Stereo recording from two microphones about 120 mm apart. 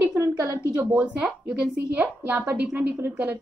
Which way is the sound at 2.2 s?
15° right (ahead or behind).